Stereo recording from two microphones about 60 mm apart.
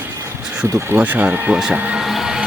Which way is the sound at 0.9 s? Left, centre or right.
Right.